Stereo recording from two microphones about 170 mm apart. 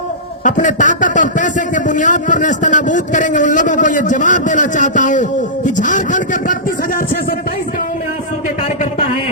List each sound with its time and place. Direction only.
0.4 s a man's voice: 45° left (ahead or behind)